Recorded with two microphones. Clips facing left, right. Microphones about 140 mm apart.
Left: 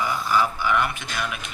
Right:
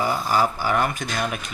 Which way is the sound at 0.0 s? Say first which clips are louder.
Right 2 dB; 40° right (ahead or behind).